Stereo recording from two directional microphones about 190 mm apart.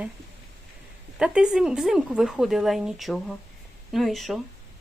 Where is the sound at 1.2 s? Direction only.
5° right (ahead or behind).